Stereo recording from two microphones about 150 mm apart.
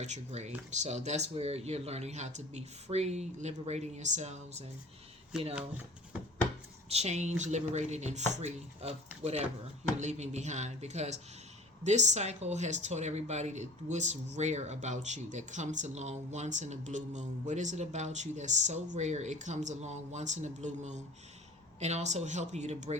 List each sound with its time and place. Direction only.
0.0 s speech: 50° right (ahead or behind)
5.3 s speech: 5° right (ahead or behind)
6.8 s speech: 45° right (ahead or behind)